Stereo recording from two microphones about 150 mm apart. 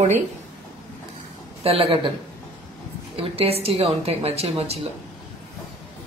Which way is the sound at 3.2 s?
40° right (ahead or behind).